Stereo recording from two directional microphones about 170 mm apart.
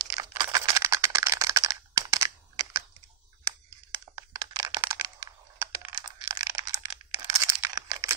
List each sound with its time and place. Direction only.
0.1 s computer keyboard: 25° right (ahead or behind)
4.4 s computer keyboard: 25° right (ahead or behind)
7.3 s a sound: 20° right (ahead or behind)